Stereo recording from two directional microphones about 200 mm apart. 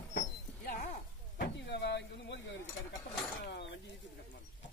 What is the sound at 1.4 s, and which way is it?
Vehicle, 55° left (ahead or behind).